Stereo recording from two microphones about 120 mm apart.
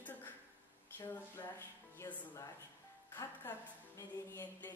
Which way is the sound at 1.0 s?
15° left (ahead or behind).